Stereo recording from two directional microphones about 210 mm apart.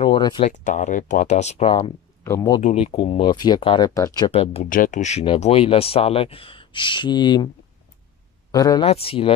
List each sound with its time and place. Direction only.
0.0 s a sound: 20° left (ahead or behind)
0.5 s speech: 35° left (ahead or behind)
2.2 s speech: 15° left (ahead or behind)
2.6 s speech: 30° left (ahead or behind)
4.6 s speech: 40° left (ahead or behind); by 7.4 s 20° left (ahead or behind)
8.5 s speech: 15° left (ahead or behind)
8.8 s speech: 30° left (ahead or behind)